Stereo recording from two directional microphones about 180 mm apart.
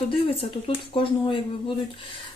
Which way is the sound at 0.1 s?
30° left (ahead or behind).